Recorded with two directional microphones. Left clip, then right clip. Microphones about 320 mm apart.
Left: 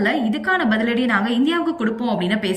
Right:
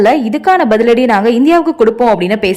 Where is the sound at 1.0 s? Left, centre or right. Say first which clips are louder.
Right 10 dB; right.